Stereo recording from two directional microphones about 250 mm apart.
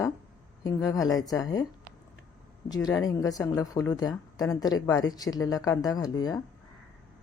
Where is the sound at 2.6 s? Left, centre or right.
Centre.